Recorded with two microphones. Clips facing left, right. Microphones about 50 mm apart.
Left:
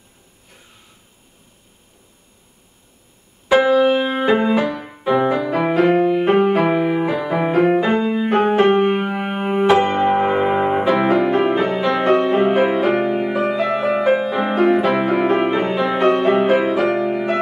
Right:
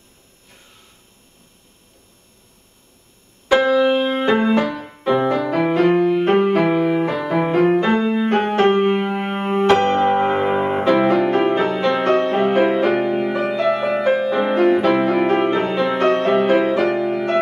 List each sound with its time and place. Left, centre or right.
3.4 s music: centre